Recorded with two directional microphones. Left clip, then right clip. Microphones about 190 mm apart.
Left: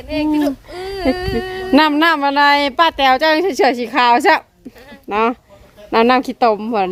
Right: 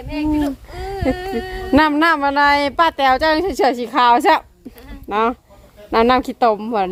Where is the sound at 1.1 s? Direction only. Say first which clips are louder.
Left 3 dB; 55° left (ahead or behind).